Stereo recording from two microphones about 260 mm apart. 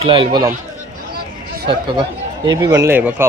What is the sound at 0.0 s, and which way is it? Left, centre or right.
Speech, centre.